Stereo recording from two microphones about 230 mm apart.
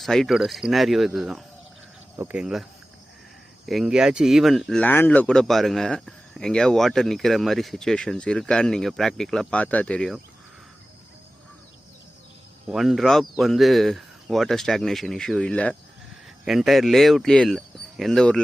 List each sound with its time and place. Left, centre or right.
0.0 s speech: centre
3.7 s speech: centre
12.6 s speech: centre